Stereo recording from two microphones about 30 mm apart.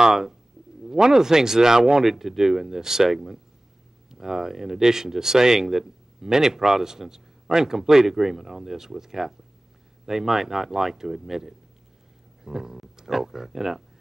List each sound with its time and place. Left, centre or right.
0.0 s speech: centre